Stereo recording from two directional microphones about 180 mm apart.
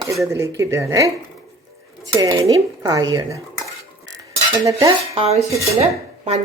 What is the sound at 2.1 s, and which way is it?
Dishes, 20° right (ahead or behind).